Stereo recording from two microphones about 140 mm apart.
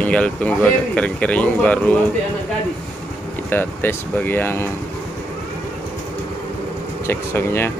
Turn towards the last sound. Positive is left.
turn(degrees=15)  # may be behind; listen again after turning